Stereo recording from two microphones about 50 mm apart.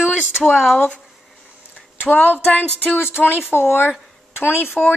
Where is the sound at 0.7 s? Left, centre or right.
Left.